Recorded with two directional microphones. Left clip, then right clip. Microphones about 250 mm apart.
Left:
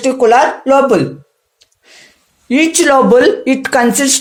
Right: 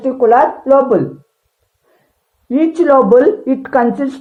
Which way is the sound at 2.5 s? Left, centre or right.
Left.